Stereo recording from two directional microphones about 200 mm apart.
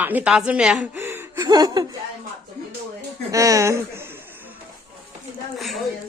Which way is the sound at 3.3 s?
15° right (ahead or behind).